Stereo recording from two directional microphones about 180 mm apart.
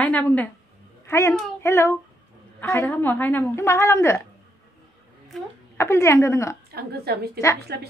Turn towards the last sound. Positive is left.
turn(degrees=-65)  # may be behind; listen again after turning